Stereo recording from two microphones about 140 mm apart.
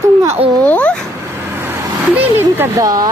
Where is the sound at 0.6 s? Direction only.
10° left (ahead or behind).